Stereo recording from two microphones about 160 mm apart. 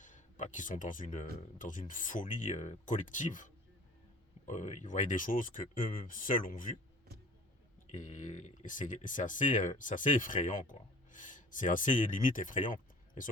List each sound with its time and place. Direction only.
0.0 s speech: 50° left (ahead or behind)
7.9 s speech: 50° left (ahead or behind)